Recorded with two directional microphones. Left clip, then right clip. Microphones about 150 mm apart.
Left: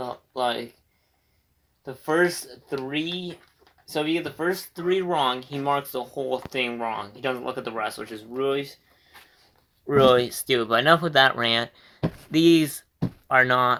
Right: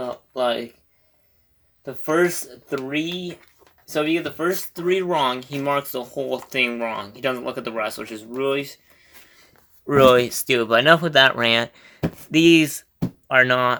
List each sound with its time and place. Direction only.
0.0 s speech: 45° right (ahead or behind)
1.8 s speech: 50° right (ahead or behind)
3.8 s speech: 30° right (ahead or behind)
9.8 s speech: 50° right (ahead or behind); by 13.7 s 25° right (ahead or behind)